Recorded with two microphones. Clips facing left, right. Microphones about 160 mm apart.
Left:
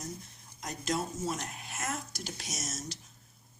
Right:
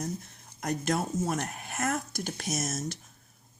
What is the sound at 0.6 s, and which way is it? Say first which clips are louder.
Speech: right 5 dB; 60° right (ahead or behind).